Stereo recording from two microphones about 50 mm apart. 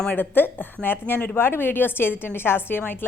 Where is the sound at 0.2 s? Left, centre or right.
Left.